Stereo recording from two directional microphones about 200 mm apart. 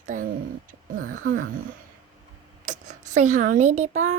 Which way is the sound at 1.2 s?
90° right.